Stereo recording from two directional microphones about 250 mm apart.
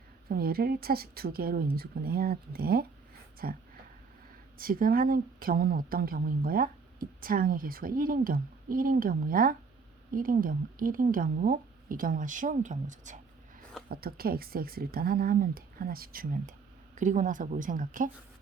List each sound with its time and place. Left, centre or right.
0.3 s a woman's voice: right